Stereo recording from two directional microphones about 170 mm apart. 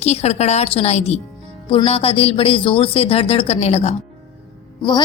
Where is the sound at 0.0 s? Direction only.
40° left (ahead or behind).